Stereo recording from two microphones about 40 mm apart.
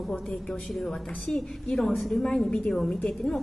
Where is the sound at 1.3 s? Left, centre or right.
Left.